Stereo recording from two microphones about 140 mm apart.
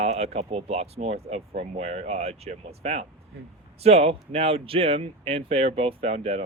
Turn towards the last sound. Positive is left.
turn(degrees=-45)  # may be behind; listen again after turning